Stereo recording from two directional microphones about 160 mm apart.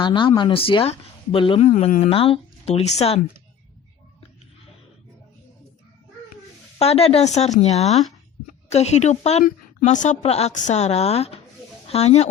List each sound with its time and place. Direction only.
0.0 s a woman's voice: 30° left (ahead or behind)
1.6 s a woman's voice: 50° left (ahead or behind)
6.7 s a woman's voice: 40° left (ahead or behind)